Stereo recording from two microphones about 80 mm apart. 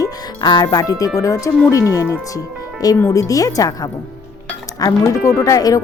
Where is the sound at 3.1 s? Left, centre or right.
Left.